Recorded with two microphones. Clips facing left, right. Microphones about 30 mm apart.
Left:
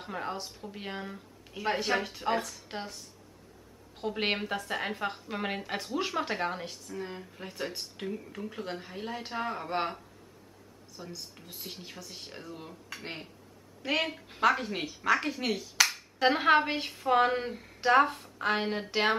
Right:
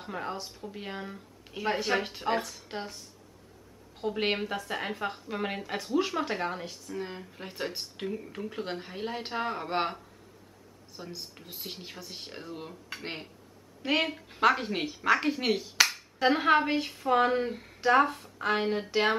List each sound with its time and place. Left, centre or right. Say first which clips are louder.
0.0 s speech: even; centre
2.2 s speech: right 1 dB; centre
3.9 s speech: right 1 dB; centre
6.9 s speech: right 4 dB; centre
11.0 s speech: right 2 dB; right; by 14.4 s centre
14.4 s speech: right 2 dB; centre
16.2 s speech: even; centre
17.5 s speech: right 2 dB; centre
17.7 s speech: even; centre